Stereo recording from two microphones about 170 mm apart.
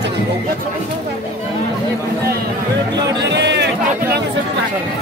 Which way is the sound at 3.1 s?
90° right.